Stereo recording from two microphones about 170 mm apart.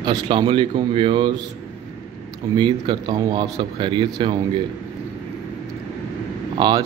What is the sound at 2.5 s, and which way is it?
Speech, 25° right (ahead or behind).